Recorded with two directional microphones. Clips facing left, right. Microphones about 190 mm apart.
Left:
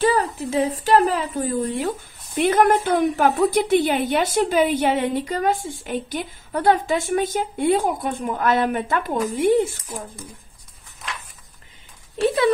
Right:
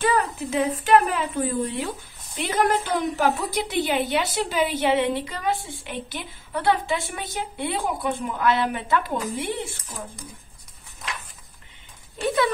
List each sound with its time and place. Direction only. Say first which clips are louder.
0.0 s a woman's voice: left 3 dB; 35° left (ahead or behind)